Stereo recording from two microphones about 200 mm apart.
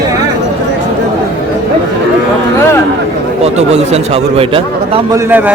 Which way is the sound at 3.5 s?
35° right (ahead or behind).